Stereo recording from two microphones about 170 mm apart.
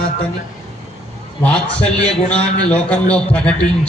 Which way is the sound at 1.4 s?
5° left (ahead or behind).